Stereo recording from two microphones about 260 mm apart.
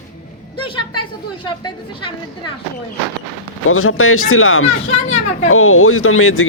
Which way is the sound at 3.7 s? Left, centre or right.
Left.